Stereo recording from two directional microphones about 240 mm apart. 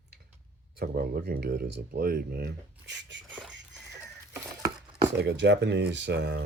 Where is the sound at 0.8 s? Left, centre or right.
Right.